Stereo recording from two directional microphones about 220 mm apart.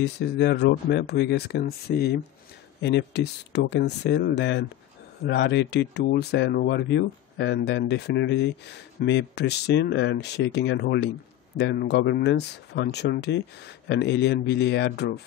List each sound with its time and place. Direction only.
0.0 s speech: 50° left (ahead or behind)